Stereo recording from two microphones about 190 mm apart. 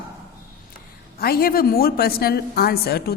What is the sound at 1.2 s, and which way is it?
A woman's voice, 55° left (ahead or behind).